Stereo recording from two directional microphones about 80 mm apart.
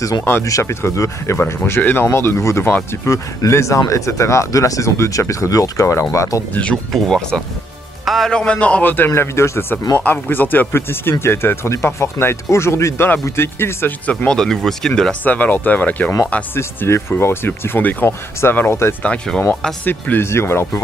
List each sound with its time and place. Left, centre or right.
0.4 s speech: left
1.6 s speech: left
6.5 s speech: centre
8.9 s speech: left
9.9 s speech: centre
14.0 s speech: centre
14.4 s speech: centre
15.2 s speech: left
16.5 s speech: left
19.0 s speech: centre
19.8 s speech: left